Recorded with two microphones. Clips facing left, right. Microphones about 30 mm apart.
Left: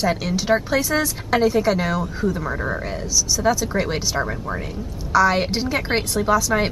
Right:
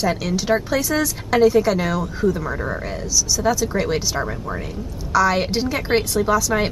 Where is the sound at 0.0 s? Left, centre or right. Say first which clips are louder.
Even; centre.